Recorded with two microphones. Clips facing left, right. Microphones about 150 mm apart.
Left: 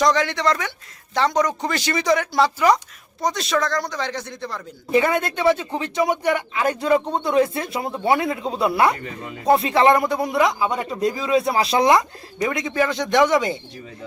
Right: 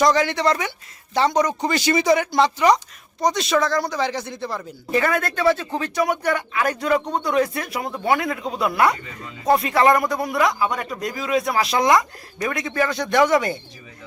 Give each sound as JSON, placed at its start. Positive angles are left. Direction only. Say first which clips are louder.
{"t": 0.0, "sound": "speech", "louder": "right 1 dB", "side_deg": -5}
{"t": 4.9, "sound": "speech", "louder": "left 2 dB", "side_deg": 20}